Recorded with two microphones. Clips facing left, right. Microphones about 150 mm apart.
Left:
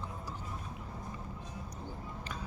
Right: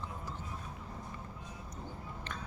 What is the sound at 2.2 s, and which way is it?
Biting, 10° left (ahead or behind).